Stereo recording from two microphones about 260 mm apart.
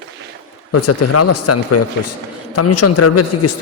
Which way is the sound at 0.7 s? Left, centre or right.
Left.